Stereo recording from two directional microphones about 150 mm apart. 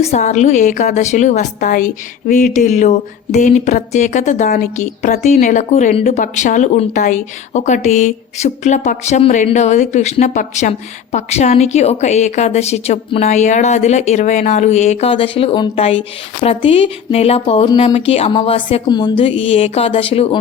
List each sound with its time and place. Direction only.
0.0 s a woman's voice: 50° left (ahead or behind)
15.1 s a woman's voice: 40° left (ahead or behind)